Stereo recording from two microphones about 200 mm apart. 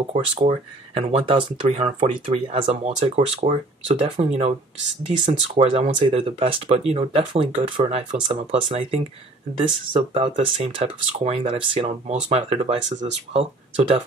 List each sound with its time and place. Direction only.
0.4 s speech: 30° right (ahead or behind)